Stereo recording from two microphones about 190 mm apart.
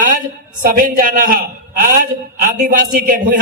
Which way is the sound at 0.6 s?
45° right (ahead or behind).